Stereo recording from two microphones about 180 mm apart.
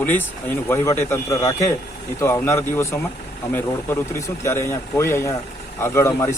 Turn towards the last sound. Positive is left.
turn(degrees=15)  # may be behind; listen again after turning